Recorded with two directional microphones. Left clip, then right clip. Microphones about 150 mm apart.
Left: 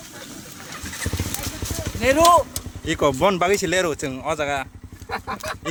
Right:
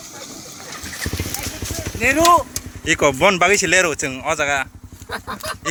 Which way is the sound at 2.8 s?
Centre (ahead or behind).